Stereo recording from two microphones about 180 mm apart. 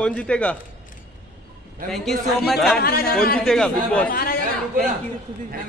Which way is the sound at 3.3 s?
5° left (ahead or behind).